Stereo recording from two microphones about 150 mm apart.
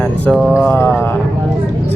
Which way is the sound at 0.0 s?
Centre (ahead or behind).